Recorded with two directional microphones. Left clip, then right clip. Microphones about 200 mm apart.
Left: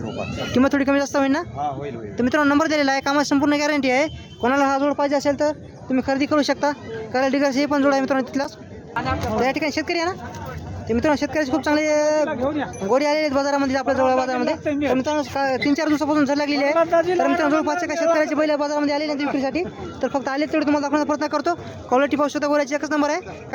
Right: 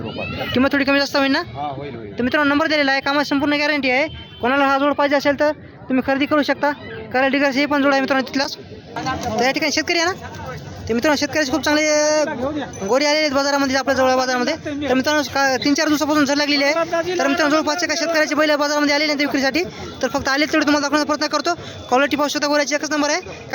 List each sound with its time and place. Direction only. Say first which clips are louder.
0.5 s speech: right 2 dB; 15° left (ahead or behind)
12.3 s speech: left 1 dB; 20° left (ahead or behind)
12.9 s speech: right 2 dB; 5° left (ahead or behind)
14.6 s speech: left 3 dB; 35° left (ahead or behind)
14.9 s speech: right 4 dB; 10° right (ahead or behind)
16.7 s speech: left 2 dB; 30° left (ahead or behind)
17.2 s speech: right 2 dB; 5° left (ahead or behind)